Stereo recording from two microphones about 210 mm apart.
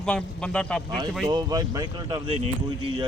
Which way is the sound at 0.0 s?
5° left (ahead or behind).